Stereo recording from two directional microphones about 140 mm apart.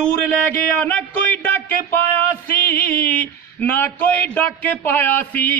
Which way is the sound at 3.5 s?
15° left (ahead or behind).